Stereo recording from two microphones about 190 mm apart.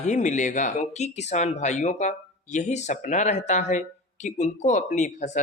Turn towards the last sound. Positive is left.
turn(degrees=40)  # may be behind; listen again after turning